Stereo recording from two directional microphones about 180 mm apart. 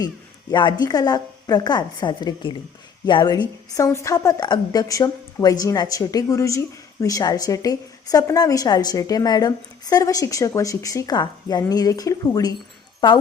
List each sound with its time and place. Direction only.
0.5 s a woman's voice: 25° left (ahead or behind)